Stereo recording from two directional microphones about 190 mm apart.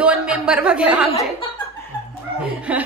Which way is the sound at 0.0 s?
5° right (ahead or behind).